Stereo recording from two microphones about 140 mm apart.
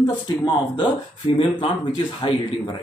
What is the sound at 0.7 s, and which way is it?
Speech, 35° left (ahead or behind).